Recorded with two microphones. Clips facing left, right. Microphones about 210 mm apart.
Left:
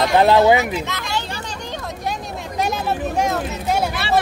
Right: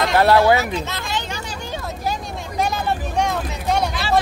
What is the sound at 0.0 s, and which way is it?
Speech, 20° left (ahead or behind).